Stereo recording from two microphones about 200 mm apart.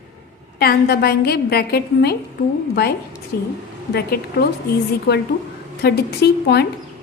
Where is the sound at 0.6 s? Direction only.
50° left (ahead or behind).